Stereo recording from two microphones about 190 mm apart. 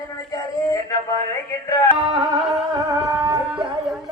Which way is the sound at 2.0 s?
20° right (ahead or behind).